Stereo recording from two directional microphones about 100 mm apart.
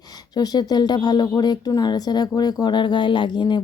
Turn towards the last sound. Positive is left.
turn(degrees=50)  # may be behind; listen again after turning